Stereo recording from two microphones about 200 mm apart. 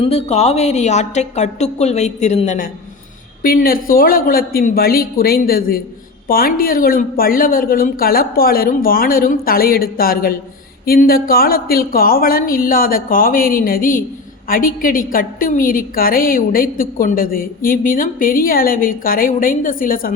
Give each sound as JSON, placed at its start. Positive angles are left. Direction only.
{"t": 0.0, "sound": "a woman's voice", "side_deg": 30}
{"t": 3.4, "sound": "a woman's voice", "side_deg": 45}